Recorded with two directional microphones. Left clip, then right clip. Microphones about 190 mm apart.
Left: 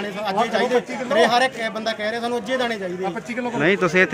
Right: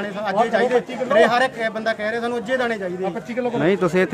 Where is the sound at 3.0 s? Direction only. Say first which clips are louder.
Right 1 dB; 35° right (ahead or behind).